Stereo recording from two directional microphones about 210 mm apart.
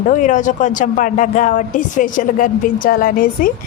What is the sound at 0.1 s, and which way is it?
A woman's voice, 40° left (ahead or behind).